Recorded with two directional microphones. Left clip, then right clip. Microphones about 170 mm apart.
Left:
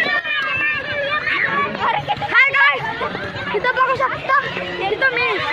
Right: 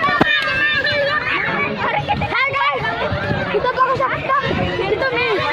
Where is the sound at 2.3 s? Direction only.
5° left (ahead or behind).